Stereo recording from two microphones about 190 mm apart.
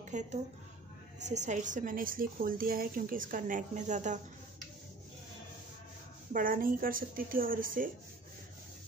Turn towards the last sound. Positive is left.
turn(degrees=-45)  # may be behind; listen again after turning